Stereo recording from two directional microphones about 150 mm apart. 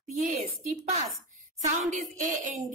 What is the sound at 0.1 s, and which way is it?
A woman's voice, 50° right (ahead or behind).